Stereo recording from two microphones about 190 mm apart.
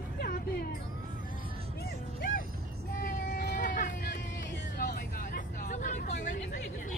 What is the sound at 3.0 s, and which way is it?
Vehicle, 45° left (ahead or behind).